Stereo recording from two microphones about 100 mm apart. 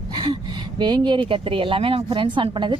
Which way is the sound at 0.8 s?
50° right (ahead or behind).